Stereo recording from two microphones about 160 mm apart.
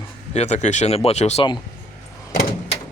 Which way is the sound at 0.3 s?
45° left (ahead or behind).